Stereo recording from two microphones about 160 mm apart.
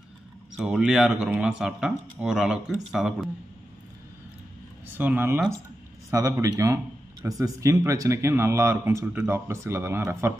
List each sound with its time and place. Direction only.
0.6 s speech: 5° right (ahead or behind)
4.9 s speech: 10° right (ahead or behind)